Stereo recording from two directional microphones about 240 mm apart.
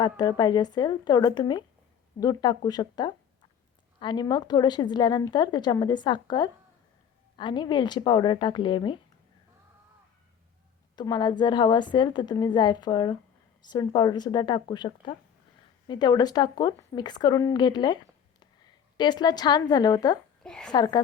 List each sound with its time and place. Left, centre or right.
0.0 s a woman's voice: centre
10.9 s a woman's voice: centre
20.4 s a woman's voice: centre
20.7 s speech: centre